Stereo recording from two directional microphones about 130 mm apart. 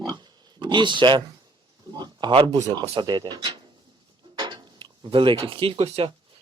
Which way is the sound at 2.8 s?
40° right (ahead or behind).